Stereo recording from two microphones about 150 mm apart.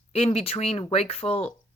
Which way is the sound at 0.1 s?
45° left (ahead or behind).